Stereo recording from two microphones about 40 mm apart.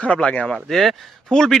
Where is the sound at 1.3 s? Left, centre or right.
Centre.